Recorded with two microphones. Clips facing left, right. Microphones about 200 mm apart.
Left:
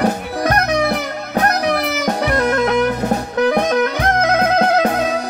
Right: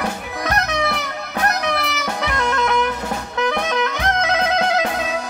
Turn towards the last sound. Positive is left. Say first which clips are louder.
# left 5 dB
turn(degrees=45)  # may be behind; listen again after turning